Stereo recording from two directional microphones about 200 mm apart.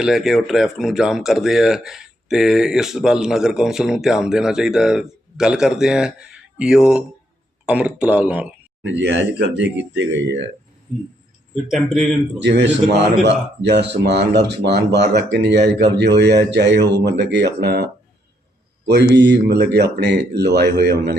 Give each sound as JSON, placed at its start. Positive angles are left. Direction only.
{"t": 0.0, "sound": "speech", "side_deg": 0}
{"t": 8.8, "sound": "speech", "side_deg": -60}
{"t": 10.9, "sound": "speech", "side_deg": 0}
{"t": 12.4, "sound": "speech", "side_deg": -60}
{"t": 18.9, "sound": "speech", "side_deg": -55}